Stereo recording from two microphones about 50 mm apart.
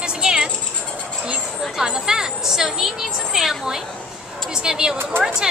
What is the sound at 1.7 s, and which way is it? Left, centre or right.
Speech, centre.